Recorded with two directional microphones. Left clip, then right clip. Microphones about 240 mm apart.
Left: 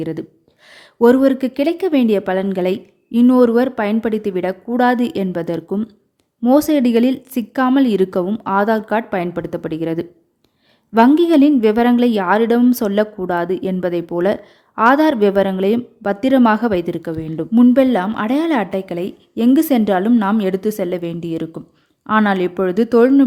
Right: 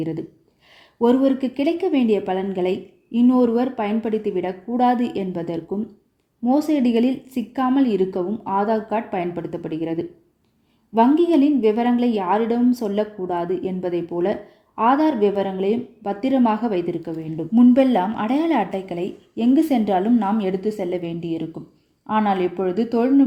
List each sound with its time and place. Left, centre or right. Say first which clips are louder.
0.0 s a woman's voice: left 3 dB; left